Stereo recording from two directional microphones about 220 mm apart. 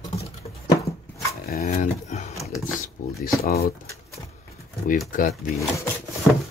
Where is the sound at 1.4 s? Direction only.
40° left (ahead or behind).